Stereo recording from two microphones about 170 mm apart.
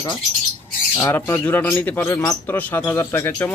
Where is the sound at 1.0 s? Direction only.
15° left (ahead or behind).